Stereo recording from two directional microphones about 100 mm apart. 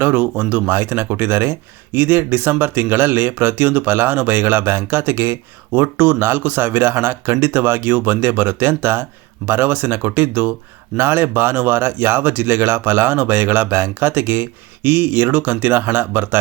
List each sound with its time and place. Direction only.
0.0 s speech: 15° right (ahead or behind)